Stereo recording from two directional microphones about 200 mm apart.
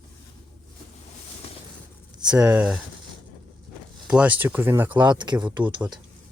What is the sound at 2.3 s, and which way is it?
Speech, 5° right (ahead or behind).